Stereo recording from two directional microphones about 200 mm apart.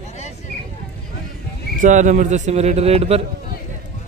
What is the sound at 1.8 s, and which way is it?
Speech, 35° right (ahead or behind).